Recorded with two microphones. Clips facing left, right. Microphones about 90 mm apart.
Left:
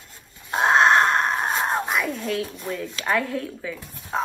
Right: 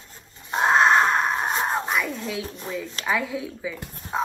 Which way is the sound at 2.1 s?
10° right (ahead or behind).